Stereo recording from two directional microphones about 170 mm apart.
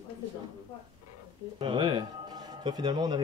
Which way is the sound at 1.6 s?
30° right (ahead or behind).